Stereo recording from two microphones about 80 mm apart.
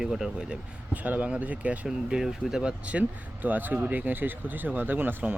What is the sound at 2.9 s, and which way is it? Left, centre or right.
Speech, centre.